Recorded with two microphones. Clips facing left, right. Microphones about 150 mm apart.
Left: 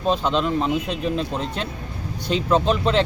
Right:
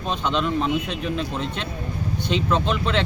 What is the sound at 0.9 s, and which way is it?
Speech, 35° left (ahead or behind).